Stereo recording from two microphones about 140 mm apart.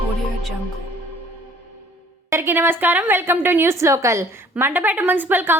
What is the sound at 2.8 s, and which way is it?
A woman's voice, 15° right (ahead or behind).